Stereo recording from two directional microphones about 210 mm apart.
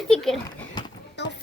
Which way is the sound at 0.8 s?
20° left (ahead or behind).